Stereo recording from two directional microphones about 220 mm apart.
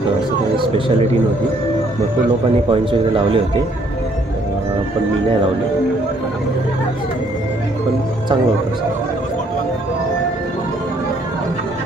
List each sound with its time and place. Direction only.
0.6 s a man's voice: 20° right (ahead or behind)
2.7 s a man's voice: 25° right (ahead or behind)